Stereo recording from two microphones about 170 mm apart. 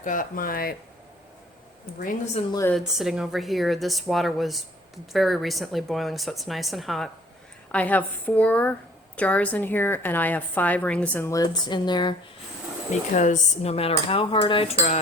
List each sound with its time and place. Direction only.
0.0 s speech: 50° left (ahead or behind)
2.5 s a woman's voice: 15° left (ahead or behind)
2.7 s a woman's voice: centre (ahead or behind); by 12.1 s 25° left (ahead or behind)
12.9 s dishes: 45° left (ahead or behind)